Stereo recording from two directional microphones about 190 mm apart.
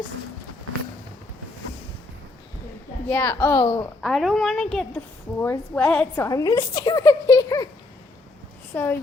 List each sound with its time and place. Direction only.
3.1 s a woman's voice: 10° left (ahead or behind)
4.0 s a woman's voice: centre (ahead or behind)
6.2 s a woman's voice: 20° left (ahead or behind)
8.7 s a woman's voice: 10° left (ahead or behind)